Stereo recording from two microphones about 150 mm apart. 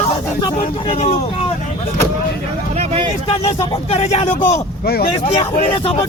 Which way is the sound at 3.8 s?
45° left (ahead or behind).